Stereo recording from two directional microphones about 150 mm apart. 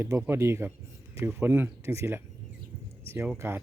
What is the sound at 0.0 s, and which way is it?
Speech, 15° right (ahead or behind).